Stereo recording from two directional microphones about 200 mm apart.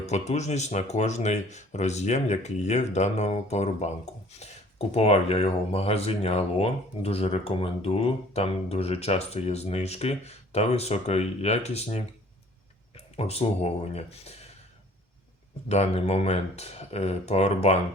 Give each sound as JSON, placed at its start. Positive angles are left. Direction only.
{"t": 0.0, "sound": "speech", "side_deg": 35}
{"t": 13.1, "sound": "speech", "side_deg": 30}
{"t": 15.7, "sound": "speech", "side_deg": 35}